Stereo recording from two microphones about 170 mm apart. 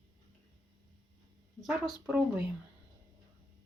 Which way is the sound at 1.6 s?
Centre (ahead or behind).